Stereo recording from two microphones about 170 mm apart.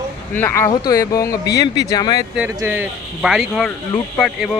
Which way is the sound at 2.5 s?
15° right (ahead or behind).